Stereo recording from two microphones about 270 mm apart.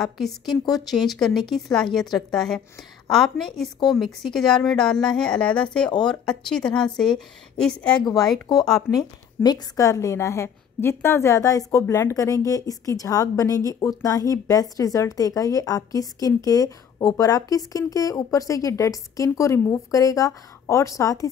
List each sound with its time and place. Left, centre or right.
0.0 s a woman's voice: centre
5.9 s a woman's voice: centre
6.2 s a woman's voice: centre